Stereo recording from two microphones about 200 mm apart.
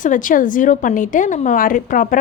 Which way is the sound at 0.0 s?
40° left (ahead or behind).